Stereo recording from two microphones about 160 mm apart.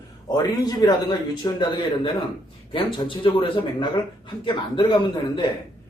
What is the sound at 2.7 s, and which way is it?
Speech, 30° left (ahead or behind).